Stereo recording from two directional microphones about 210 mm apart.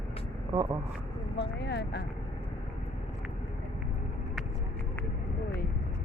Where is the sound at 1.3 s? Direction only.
55° left (ahead or behind).